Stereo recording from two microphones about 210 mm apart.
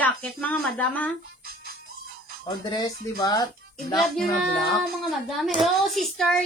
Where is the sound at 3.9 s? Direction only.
Centre (ahead or behind).